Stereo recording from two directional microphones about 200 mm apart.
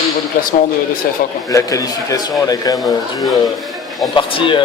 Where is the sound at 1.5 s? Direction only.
15° left (ahead or behind).